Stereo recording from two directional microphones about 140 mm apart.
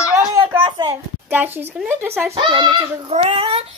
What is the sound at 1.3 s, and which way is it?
Speech, 15° right (ahead or behind).